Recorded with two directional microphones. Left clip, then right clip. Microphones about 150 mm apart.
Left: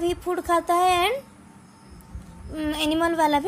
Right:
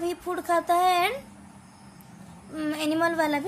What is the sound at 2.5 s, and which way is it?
Speech, 25° left (ahead or behind).